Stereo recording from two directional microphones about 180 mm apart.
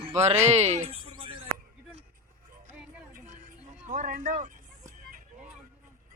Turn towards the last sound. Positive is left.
turn(degrees=-45)  # may be behind; listen again after turning